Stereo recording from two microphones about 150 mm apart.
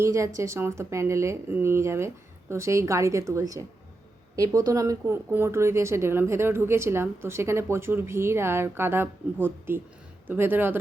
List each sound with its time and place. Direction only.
0.0 s speech: 20° right (ahead or behind)